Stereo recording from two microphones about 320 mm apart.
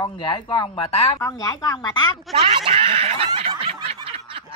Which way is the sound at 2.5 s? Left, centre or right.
Centre.